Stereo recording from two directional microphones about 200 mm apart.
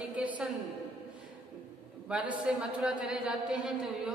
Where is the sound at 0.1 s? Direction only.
5° right (ahead or behind).